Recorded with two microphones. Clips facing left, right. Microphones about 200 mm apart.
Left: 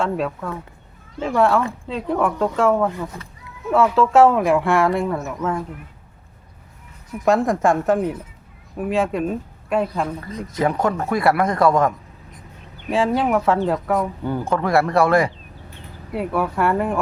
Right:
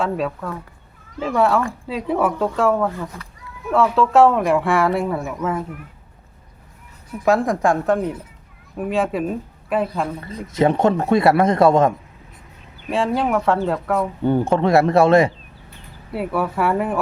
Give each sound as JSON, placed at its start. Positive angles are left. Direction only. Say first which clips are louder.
{"t": 0.0, "sound": "speech", "louder": "even", "side_deg": 0}
{"t": 7.1, "sound": "speech", "louder": "even", "side_deg": 0}
{"t": 10.5, "sound": "speech", "louder": "right 4 dB", "side_deg": -25}
{"t": 12.9, "sound": "speech", "louder": "left 1 dB", "side_deg": 0}
{"t": 14.3, "sound": "speech", "louder": "right 7 dB", "side_deg": -25}
{"t": 16.1, "sound": "speech", "louder": "even", "side_deg": -5}